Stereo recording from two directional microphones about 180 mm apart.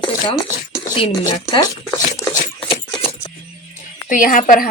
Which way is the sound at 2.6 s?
30° left (ahead or behind).